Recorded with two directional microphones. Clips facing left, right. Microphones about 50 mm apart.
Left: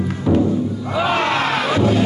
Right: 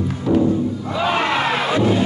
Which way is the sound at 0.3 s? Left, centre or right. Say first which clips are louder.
Left 1 dB; centre.